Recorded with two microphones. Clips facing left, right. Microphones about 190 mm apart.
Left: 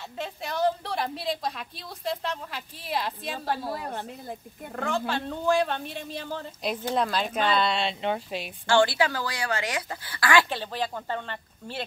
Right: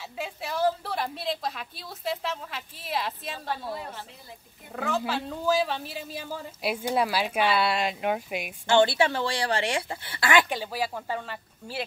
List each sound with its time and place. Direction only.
0.2 s a woman's voice: 5° right (ahead or behind)
3.8 s a woman's voice: 50° left (ahead or behind)
4.7 s speech: 5° right (ahead or behind); by 10.6 s 20° right (ahead or behind)
10.6 s speech: 10° right (ahead or behind)